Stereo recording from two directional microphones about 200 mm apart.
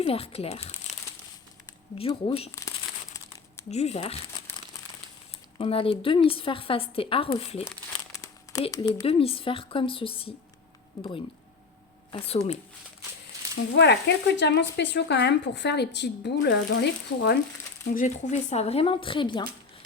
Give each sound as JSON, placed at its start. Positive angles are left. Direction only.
{"t": 0.0, "sound": "speech", "side_deg": 30}
{"t": 2.0, "sound": "speech", "side_deg": 30}
{"t": 2.6, "sound": "crumpling", "side_deg": 15}
{"t": 3.7, "sound": "speech", "side_deg": 35}
{"t": 5.5, "sound": "speech", "side_deg": 25}
{"t": 8.8, "sound": "speech", "side_deg": 25}
{"t": 12.1, "sound": "speech", "side_deg": 30}
{"t": 13.6, "sound": "a woman's voice", "side_deg": 60}
{"t": 17.9, "sound": "speech", "side_deg": 35}